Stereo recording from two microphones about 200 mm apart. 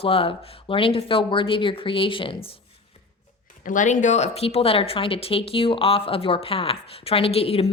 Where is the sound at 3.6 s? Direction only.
40° left (ahead or behind).